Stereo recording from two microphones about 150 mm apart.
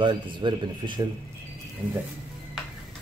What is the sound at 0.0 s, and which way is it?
Speech, 30° right (ahead or behind).